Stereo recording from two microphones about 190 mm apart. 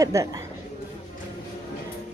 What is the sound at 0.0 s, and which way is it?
Speech, 15° right (ahead or behind).